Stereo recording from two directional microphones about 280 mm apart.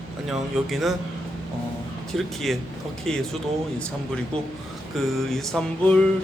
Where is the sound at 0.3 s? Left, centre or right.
Centre.